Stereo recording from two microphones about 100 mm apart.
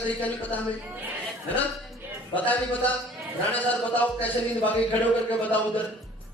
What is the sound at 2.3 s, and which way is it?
A man's voice, 15° left (ahead or behind).